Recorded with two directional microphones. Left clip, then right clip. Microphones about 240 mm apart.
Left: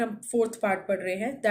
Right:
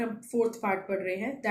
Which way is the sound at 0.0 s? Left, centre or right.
Left.